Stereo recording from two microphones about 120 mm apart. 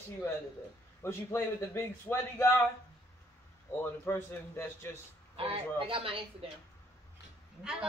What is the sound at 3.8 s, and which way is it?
A man's voice, 20° left (ahead or behind).